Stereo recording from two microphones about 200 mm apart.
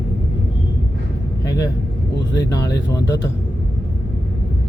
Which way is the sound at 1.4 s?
15° left (ahead or behind).